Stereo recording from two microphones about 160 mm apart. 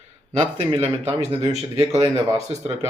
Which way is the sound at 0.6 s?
40° right (ahead or behind).